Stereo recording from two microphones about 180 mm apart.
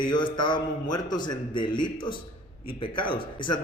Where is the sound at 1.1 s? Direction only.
25° left (ahead or behind).